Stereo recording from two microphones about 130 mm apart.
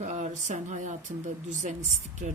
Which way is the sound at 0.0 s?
65° right (ahead or behind).